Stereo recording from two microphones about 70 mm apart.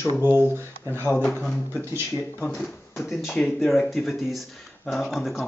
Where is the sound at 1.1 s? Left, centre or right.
Centre.